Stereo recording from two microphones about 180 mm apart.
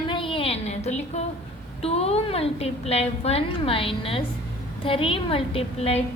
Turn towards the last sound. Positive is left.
turn(degrees=35)  # may be behind; listen again after turning